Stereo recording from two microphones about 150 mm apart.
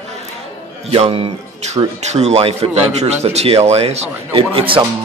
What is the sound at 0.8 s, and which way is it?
A man's voice, 40° right (ahead or behind).